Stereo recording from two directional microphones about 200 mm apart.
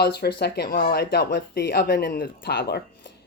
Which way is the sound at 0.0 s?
55° left (ahead or behind).